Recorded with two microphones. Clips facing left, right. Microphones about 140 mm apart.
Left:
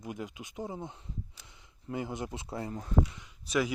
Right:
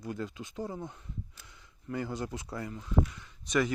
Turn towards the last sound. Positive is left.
turn(degrees=5)  # may be behind; listen again after turning